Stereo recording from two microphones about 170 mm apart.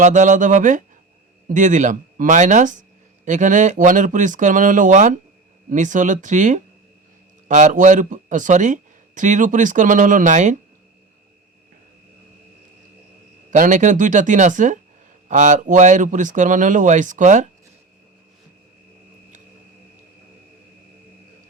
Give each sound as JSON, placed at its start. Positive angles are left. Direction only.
{"t": 0.0, "sound": "speech", "side_deg": -45}
{"t": 13.5, "sound": "speech", "side_deg": -45}